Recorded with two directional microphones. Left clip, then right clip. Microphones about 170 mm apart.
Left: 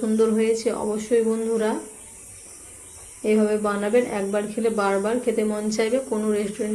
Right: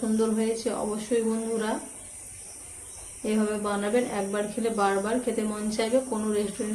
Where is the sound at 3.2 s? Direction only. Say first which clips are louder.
Left 7 dB; 25° left (ahead or behind).